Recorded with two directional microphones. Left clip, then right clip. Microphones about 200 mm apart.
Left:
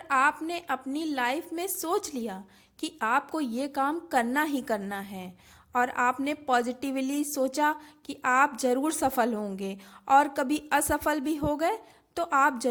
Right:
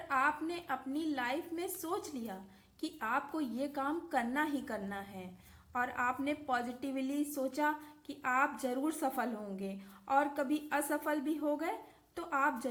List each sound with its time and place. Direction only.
0.1 s a woman's voice: 35° left (ahead or behind)